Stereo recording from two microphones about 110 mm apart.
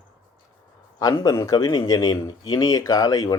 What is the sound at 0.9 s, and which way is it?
Speech, 35° left (ahead or behind).